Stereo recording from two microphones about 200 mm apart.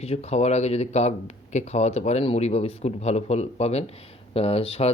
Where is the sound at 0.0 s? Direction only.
30° left (ahead or behind).